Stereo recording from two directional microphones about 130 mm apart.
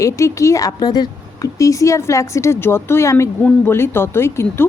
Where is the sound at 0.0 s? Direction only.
25° left (ahead or behind).